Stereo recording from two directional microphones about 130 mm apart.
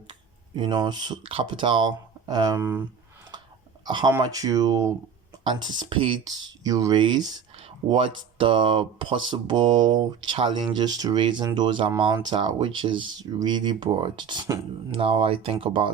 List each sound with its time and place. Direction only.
0.1 s speech: 35° right (ahead or behind)
2.2 s a sound: 30° right (ahead or behind)
3.8 s speech: 35° right (ahead or behind)
5.4 s speech: 40° right (ahead or behind)
6.7 s speech: 30° right (ahead or behind)
14.9 s speech: 45° right (ahead or behind)